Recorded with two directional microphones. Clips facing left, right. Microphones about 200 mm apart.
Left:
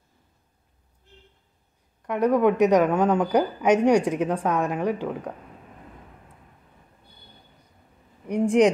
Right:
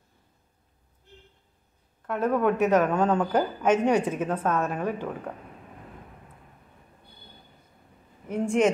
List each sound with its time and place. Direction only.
2.0 s a woman's voice: 15° left (ahead or behind)
5.3 s speech: centre (ahead or behind)
8.3 s a woman's voice: 15° left (ahead or behind)